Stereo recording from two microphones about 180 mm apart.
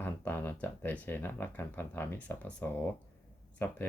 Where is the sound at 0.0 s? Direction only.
10° left (ahead or behind).